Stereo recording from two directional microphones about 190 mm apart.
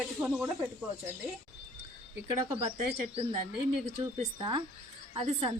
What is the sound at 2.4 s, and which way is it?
Speech, 30° right (ahead or behind).